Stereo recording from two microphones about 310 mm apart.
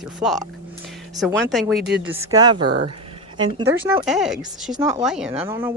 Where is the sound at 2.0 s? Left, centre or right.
Centre.